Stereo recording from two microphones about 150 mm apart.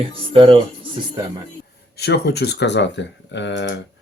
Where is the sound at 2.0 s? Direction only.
90° left.